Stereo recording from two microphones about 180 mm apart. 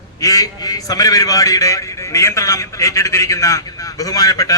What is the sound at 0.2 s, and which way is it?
A man's voice, 20° left (ahead or behind).